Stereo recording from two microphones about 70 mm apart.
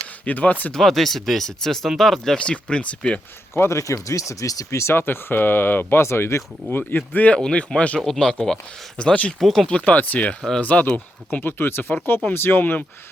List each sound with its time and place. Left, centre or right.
0.3 s speech: left
0.7 s speech: centre
3.5 s speech: left
7.3 s speech: centre
9.4 s speech: centre
9.6 s speech: left